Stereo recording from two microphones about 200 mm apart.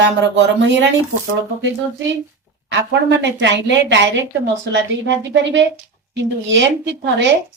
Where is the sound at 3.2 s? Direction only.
65° right (ahead or behind).